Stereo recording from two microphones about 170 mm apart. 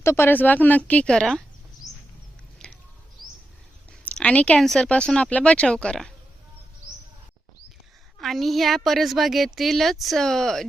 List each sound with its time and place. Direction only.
0.0 s speech: 15° left (ahead or behind)
2.6 s a sound: 5° left (ahead or behind)
4.0 s speech: 10° left (ahead or behind)
8.2 s speech: centre (ahead or behind)